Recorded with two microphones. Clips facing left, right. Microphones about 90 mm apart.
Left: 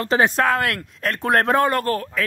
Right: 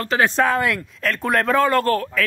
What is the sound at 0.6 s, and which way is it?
Speech, 55° left (ahead or behind).